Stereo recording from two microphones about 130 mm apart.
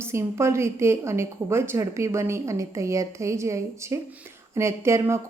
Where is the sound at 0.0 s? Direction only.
20° right (ahead or behind).